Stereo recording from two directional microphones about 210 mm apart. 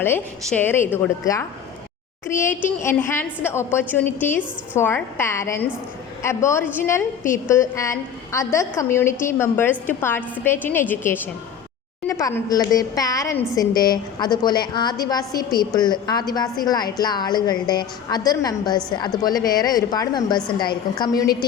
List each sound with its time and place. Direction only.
0.0 s a woman's voice: 10° left (ahead or behind)